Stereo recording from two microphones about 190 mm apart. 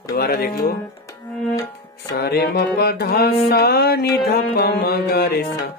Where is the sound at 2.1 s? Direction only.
60° left (ahead or behind).